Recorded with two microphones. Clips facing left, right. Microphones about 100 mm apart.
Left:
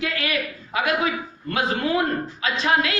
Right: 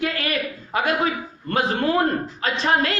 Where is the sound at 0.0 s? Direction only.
40° right (ahead or behind).